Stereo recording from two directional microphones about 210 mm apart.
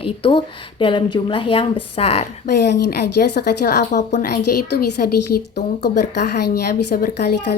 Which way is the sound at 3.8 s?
35° left (ahead or behind).